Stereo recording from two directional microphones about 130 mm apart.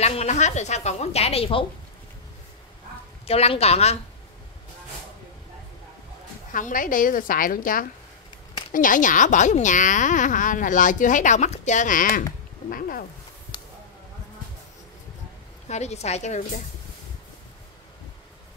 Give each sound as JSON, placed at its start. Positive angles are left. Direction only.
{"t": 0.0, "sound": "a woman's voice", "side_deg": 55}
{"t": 3.3, "sound": "a woman's voice", "side_deg": 50}
{"t": 6.5, "sound": "a woman's voice", "side_deg": 90}
{"t": 13.5, "sound": "a sound", "side_deg": 35}
{"t": 15.7, "sound": "a woman's voice", "side_deg": 60}